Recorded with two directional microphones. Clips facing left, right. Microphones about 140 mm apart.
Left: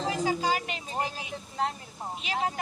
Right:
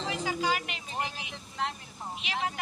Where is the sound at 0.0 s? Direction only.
35° left (ahead or behind).